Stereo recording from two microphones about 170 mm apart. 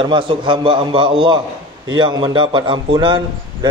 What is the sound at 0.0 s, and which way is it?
A man's voice, 30° right (ahead or behind).